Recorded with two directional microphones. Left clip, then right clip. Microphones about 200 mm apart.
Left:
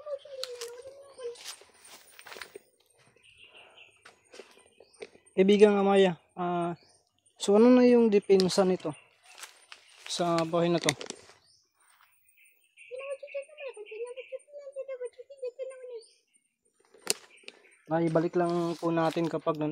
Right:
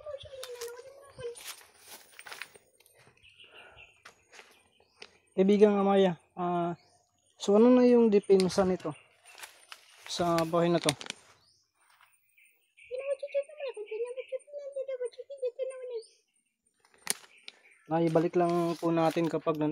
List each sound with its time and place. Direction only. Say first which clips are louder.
1.4 s a sound: left 1 dB; 5° right (ahead or behind)
3.5 s bird: right 1 dB; 15° right (ahead or behind)
5.3 s speech: left 2 dB; 10° left (ahead or behind)
10.0 s speech: even; centre (ahead or behind)
12.9 s a sound: right 5 dB; 45° right (ahead or behind)
18.0 s speech: right 1 dB; 15° left (ahead or behind)